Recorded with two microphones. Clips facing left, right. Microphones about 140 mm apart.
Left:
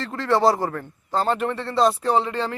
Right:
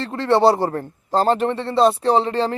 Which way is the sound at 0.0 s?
25° right (ahead or behind).